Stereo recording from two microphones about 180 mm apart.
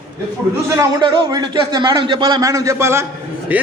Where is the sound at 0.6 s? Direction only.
15° right (ahead or behind).